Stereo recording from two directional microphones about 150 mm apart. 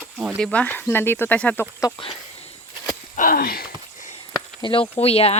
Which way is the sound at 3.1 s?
70° left (ahead or behind).